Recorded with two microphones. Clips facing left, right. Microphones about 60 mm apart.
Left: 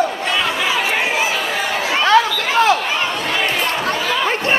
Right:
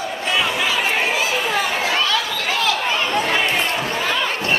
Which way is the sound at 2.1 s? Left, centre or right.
Left.